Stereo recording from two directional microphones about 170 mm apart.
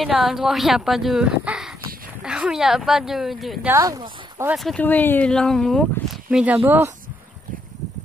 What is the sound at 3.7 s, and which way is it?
Speech, 20° right (ahead or behind).